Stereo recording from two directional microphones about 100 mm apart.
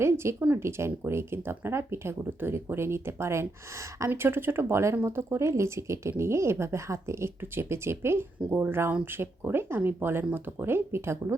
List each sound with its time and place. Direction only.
0.0 s speech: 25° right (ahead or behind)